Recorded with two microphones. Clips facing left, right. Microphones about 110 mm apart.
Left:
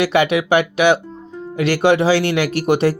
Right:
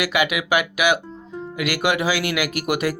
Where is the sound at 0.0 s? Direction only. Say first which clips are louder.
Left 6 dB; 30° left (ahead or behind).